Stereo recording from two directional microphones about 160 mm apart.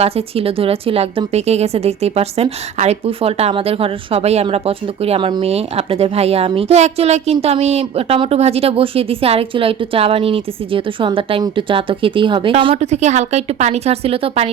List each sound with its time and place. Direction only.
0.0 s a woman's voice: 35° right (ahead or behind)